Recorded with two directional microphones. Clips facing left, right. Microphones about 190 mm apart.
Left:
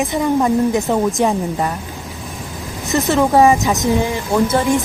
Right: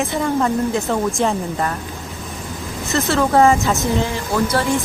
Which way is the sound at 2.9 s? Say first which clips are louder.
Left 2 dB; 15° left (ahead or behind).